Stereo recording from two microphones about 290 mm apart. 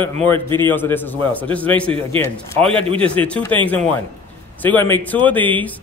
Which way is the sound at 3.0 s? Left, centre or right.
Centre.